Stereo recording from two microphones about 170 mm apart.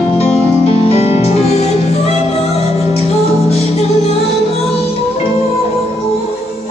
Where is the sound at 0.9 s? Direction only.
40° left (ahead or behind).